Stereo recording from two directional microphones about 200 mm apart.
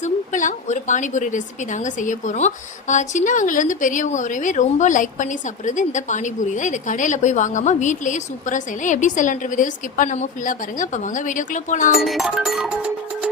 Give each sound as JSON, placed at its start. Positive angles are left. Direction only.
{"t": 0.0, "sound": "a woman's voice", "side_deg": 40}
{"t": 11.9, "sound": "music", "side_deg": 0}